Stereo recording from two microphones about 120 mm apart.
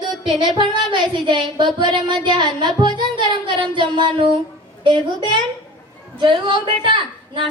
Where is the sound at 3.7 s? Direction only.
45° right (ahead or behind).